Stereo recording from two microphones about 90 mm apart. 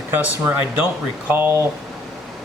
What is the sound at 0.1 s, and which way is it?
Speech, 20° right (ahead or behind).